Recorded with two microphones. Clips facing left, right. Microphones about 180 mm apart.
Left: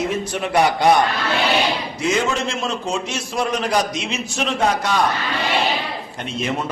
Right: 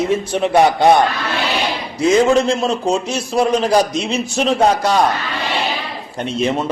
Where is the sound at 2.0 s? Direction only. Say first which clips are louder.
Right 9 dB; 35° right (ahead or behind).